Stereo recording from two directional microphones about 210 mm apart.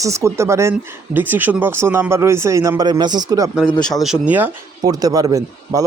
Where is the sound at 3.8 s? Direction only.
Centre (ahead or behind); by 5.8 s 15° right (ahead or behind).